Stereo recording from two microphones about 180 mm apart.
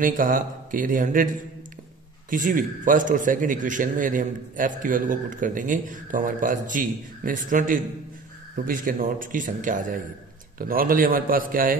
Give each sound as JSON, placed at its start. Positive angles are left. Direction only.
{"t": 0.0, "sound": "a man's voice", "side_deg": -50}